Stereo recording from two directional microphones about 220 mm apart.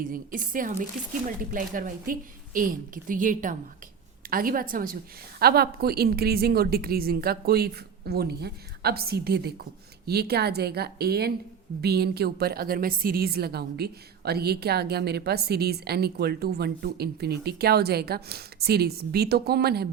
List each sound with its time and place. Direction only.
0.0 s a woman's voice: 40° right (ahead or behind)